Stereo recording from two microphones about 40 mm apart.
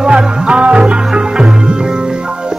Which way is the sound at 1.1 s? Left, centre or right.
Right.